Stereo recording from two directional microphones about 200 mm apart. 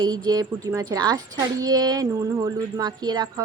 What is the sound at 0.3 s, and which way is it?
A woman's voice, 20° right (ahead or behind).